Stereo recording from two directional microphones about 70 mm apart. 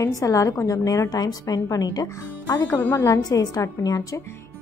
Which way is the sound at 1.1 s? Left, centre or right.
Left.